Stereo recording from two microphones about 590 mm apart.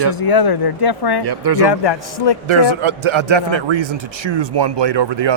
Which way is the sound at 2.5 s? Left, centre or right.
Right.